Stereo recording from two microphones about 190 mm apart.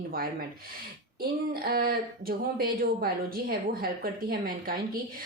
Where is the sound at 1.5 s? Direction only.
50° right (ahead or behind).